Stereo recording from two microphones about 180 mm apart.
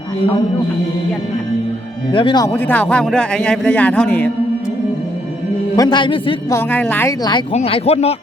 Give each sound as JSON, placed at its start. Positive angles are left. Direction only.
{"t": 2.1, "sound": "a man's voice", "side_deg": 25}
{"t": 2.5, "sound": "a man's voice", "side_deg": 10}
{"t": 5.7, "sound": "a man's voice", "side_deg": 20}
{"t": 6.5, "sound": "a man's voice", "side_deg": 10}
{"t": 7.5, "sound": "speech", "side_deg": 35}